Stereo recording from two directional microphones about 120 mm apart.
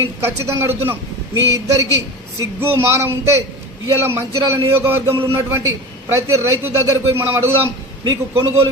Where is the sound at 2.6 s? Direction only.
20° right (ahead or behind).